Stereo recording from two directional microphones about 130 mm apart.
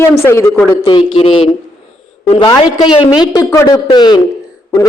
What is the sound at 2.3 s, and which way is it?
A man's voice, 35° left (ahead or behind).